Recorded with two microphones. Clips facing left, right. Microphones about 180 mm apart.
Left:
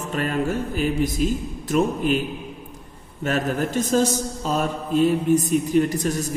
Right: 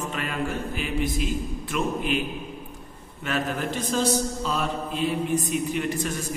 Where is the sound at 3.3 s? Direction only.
45° left (ahead or behind).